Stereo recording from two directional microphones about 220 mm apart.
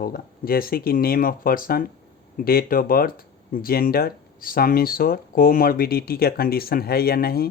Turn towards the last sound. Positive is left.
turn(degrees=45)  # may be behind; listen again after turning